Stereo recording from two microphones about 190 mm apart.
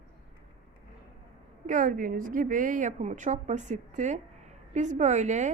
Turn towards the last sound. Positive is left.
turn(degrees=-40)  # may be behind; listen again after turning